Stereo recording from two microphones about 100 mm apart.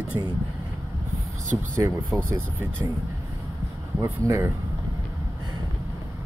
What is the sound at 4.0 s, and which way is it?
Speech, 20° right (ahead or behind).